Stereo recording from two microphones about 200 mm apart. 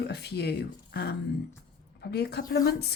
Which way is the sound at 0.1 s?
55° left (ahead or behind).